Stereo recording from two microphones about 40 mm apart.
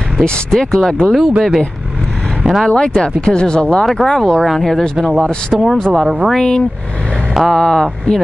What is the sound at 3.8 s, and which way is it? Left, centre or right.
Speech, centre.